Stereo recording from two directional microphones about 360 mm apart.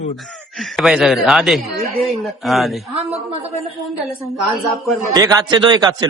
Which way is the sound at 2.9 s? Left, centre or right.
Centre.